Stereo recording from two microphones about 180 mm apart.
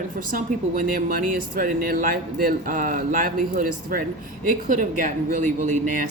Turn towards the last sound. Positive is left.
turn(degrees=-45)  # may be behind; listen again after turning